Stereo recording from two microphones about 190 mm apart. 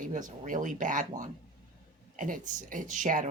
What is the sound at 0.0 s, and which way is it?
Speech, 45° right (ahead or behind).